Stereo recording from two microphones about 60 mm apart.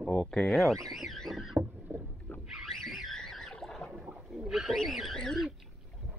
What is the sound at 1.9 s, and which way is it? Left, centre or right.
Rowboat, right.